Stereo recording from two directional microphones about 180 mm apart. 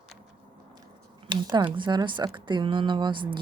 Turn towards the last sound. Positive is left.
turn(degrees=-25)  # may be behind; listen again after turning